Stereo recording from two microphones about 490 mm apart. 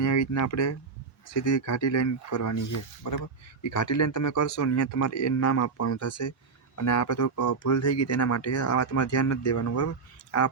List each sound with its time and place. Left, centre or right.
0.0 s speech: left
3.7 s speech: left